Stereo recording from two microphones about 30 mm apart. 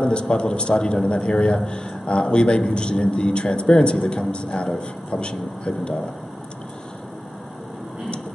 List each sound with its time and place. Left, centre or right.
0.0 s a man's voice: left